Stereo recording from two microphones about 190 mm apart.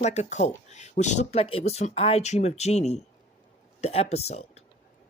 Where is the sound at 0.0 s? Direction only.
35° left (ahead or behind).